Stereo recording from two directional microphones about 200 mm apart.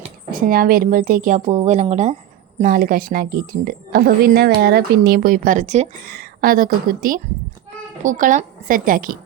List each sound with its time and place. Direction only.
0.3 s a woman's voice: 45° right (ahead or behind)
6.1 s a woman's voice: 45° right (ahead or behind)